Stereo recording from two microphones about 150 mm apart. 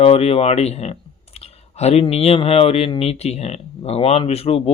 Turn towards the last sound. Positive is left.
turn(degrees=40)  # may be behind; listen again after turning